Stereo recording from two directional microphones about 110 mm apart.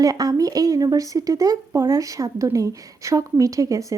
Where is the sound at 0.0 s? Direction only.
35° right (ahead or behind).